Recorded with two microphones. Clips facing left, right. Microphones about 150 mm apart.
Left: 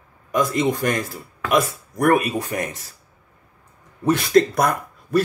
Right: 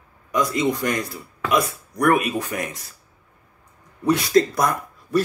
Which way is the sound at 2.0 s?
40° left (ahead or behind).